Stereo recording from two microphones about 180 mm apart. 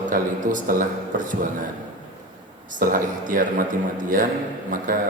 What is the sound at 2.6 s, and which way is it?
Speech, 45° right (ahead or behind).